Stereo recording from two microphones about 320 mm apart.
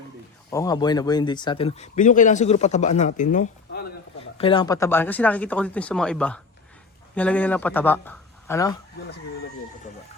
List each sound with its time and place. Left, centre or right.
0.5 s speech: centre